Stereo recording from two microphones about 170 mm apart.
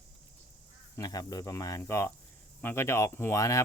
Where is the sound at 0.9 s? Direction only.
20° left (ahead or behind).